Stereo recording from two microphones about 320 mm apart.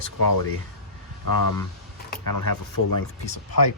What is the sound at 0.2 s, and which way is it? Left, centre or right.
Speech, left.